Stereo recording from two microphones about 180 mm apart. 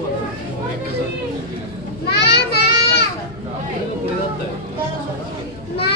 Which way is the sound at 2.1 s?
65° left (ahead or behind).